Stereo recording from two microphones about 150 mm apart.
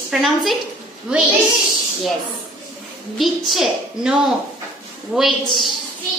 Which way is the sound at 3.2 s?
Centre (ahead or behind).